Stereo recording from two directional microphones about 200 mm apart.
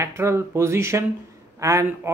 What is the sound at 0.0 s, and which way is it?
Speech, 15° right (ahead or behind).